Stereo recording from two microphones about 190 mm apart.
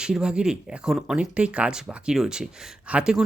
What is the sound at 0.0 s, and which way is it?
Speech, 5° right (ahead or behind).